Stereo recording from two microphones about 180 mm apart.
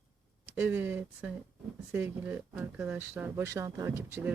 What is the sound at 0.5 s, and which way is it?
Speech, 10° right (ahead or behind).